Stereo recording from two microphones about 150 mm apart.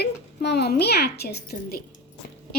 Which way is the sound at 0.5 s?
90° left.